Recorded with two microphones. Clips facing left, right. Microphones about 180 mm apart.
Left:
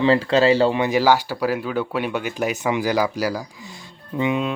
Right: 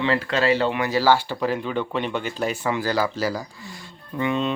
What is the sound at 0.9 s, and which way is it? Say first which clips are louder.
Speech: left 2 dB; 15° left (ahead or behind).